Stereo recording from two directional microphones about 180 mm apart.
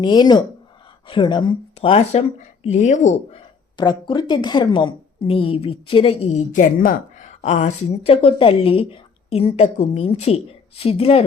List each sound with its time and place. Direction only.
0.0 s a woman's voice: 25° left (ahead or behind); by 3.4 s 40° left (ahead or behind)
3.8 s a woman's voice: 25° left (ahead or behind)